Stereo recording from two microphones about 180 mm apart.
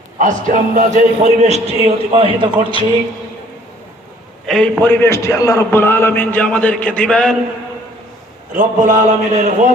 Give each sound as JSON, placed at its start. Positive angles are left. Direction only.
{"t": 0.2, "sound": "a man's voice", "side_deg": -45}
{"t": 4.4, "sound": "a man's voice", "side_deg": 0}
{"t": 8.5, "sound": "a man's voice", "side_deg": -45}